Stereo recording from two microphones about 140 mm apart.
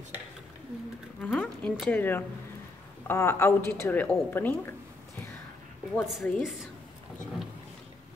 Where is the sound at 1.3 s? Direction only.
5° left (ahead or behind).